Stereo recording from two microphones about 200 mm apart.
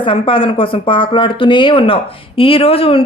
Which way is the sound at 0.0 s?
25° left (ahead or behind).